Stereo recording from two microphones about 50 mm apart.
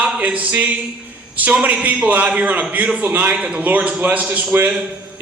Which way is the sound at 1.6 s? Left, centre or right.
Right.